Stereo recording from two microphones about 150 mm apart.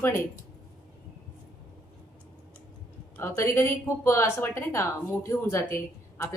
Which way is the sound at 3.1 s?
15° left (ahead or behind).